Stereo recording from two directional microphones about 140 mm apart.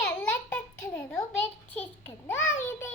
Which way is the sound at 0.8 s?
15° left (ahead or behind).